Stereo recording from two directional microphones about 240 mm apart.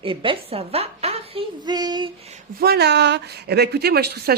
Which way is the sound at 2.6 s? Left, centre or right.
Right.